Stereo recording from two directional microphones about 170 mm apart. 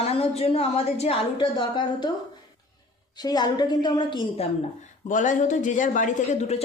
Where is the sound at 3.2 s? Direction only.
25° left (ahead or behind).